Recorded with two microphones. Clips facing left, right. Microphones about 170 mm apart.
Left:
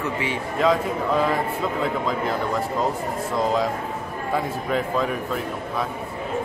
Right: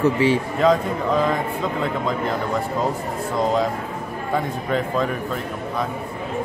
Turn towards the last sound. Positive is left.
turn(degrees=0)  # may be behind; listen again after turning